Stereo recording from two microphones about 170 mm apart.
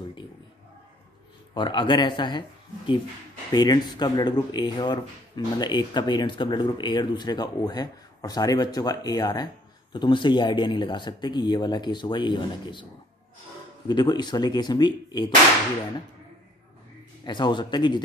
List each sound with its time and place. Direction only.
1.5 s speech: 30° left (ahead or behind)
3.5 s speech: 25° left (ahead or behind)
13.8 s speech: 25° left (ahead or behind)
17.2 s speech: 25° left (ahead or behind)